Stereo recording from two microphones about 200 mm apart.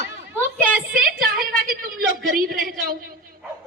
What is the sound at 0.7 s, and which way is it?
Speech, centre (ahead or behind).